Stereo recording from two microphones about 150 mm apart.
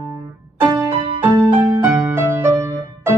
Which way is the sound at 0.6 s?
30° right (ahead or behind).